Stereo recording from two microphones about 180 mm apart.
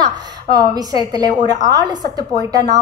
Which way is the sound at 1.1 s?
20° right (ahead or behind).